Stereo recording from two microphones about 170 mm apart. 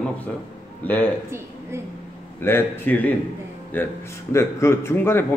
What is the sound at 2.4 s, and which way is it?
A man's voice, 15° left (ahead or behind).